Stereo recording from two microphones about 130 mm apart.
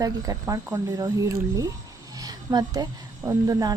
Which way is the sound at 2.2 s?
30° right (ahead or behind).